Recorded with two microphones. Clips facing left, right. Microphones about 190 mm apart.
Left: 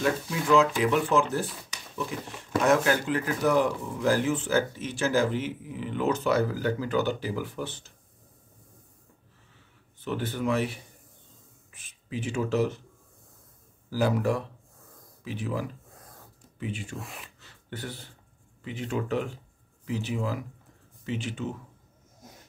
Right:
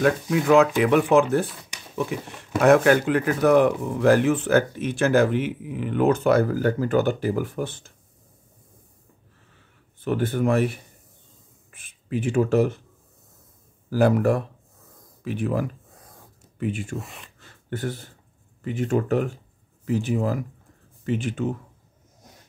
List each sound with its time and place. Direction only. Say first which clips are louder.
0.0 s speech: right 7 dB; 60° right (ahead or behind)
2.6 s speech: right 7 dB; 60° right (ahead or behind)
10.0 s speech: right 6 dB; 50° right (ahead or behind)
13.8 s speech: right 6 dB; 55° right (ahead or behind)
17.0 s speech: even; centre (ahead or behind)
17.4 s a sound: right 10 dB; 50° right (ahead or behind)
18.6 s speech: right 8 dB; 50° right (ahead or behind)